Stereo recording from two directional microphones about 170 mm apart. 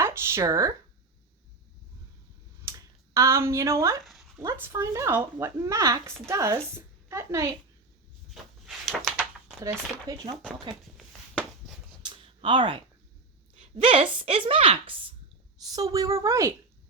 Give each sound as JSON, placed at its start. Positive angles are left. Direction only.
{"t": 0.0, "sound": "speech", "side_deg": -15}
{"t": 2.6, "sound": "speech", "side_deg": -15}
{"t": 4.0, "sound": "a sound", "side_deg": 0}
{"t": 4.4, "sound": "speech", "side_deg": -15}
{"t": 8.6, "sound": "a sound", "side_deg": 0}
{"t": 9.6, "sound": "a woman's voice", "side_deg": -20}
{"t": 12.0, "sound": "a sound", "side_deg": -30}
{"t": 13.6, "sound": "speech", "side_deg": -30}
{"t": 15.7, "sound": "a woman's voice", "side_deg": -20}